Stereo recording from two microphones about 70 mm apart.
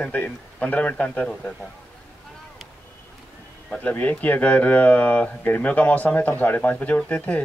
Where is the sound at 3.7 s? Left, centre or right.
Left.